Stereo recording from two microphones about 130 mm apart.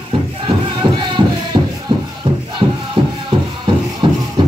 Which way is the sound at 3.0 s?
40° right (ahead or behind).